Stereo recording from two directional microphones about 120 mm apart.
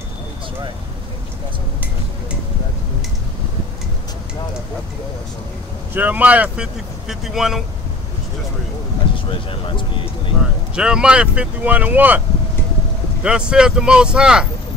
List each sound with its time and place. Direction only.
5.9 s speech: 15° right (ahead or behind)
9.3 s speech: 45° left (ahead or behind)
10.8 s speech: 5° right (ahead or behind)
13.2 s speech: 5° right (ahead or behind)